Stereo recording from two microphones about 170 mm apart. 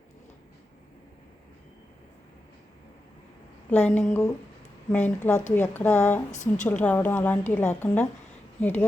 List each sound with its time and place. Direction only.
3.7 s a woman's voice: 10° left (ahead or behind)
6.3 s a woman's voice: 45° left (ahead or behind)
6.7 s a woman's voice: 10° left (ahead or behind)